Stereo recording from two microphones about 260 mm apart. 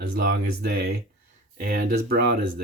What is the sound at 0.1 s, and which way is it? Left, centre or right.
Speech, right.